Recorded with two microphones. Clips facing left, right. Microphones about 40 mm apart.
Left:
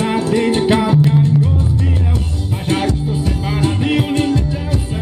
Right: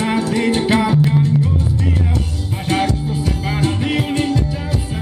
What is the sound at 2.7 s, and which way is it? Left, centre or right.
Music, centre.